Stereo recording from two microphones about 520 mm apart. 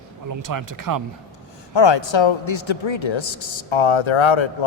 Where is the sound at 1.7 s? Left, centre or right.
Left.